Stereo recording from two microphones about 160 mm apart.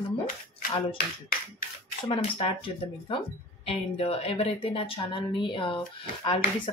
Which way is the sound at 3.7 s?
40° left (ahead or behind).